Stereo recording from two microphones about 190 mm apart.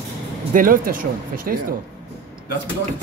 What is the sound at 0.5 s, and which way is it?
Speech, 45° right (ahead or behind).